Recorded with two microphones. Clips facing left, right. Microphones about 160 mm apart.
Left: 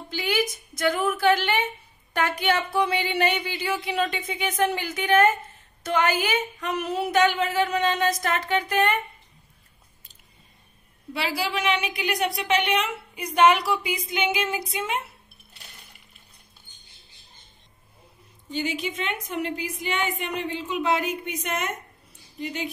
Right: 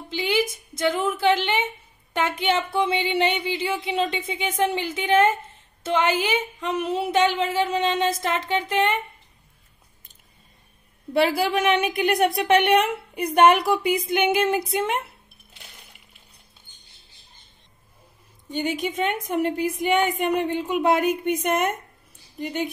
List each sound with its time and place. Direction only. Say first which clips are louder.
0.1 s a woman's voice: right 3 dB; 25° right (ahead or behind)
11.1 s a woman's voice: right 7 dB; 50° right (ahead or behind)
18.5 s a woman's voice: right 3 dB; 50° right (ahead or behind)